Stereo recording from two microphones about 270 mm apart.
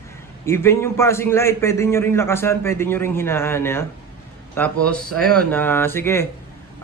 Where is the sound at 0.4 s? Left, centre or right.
Centre.